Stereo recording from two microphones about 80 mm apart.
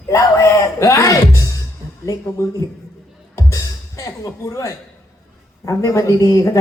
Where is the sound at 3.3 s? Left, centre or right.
Left.